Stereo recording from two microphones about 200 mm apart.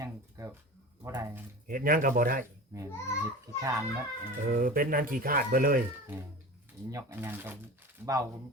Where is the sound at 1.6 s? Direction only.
45° right (ahead or behind).